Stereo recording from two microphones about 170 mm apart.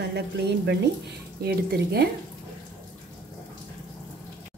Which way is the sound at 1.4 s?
65° right (ahead or behind).